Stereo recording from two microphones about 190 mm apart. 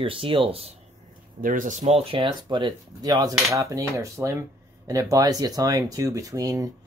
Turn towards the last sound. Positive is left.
turn(degrees=-20)  # may be behind; listen again after turning